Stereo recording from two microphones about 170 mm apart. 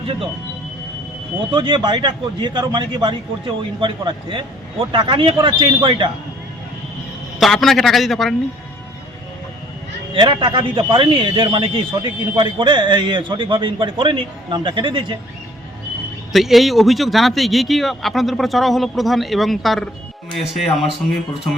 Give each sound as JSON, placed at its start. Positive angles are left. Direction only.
{"t": 1.5, "sound": "a man's voice", "side_deg": -25}
{"t": 7.3, "sound": "speech", "side_deg": 0}
{"t": 10.2, "sound": "a man's voice", "side_deg": -30}
{"t": 16.3, "sound": "speech", "side_deg": 0}